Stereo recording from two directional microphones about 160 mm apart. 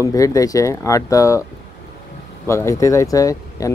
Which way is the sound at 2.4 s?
15° left (ahead or behind).